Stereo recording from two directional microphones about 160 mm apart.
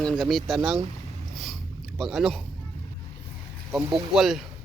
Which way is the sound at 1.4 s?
Centre (ahead or behind).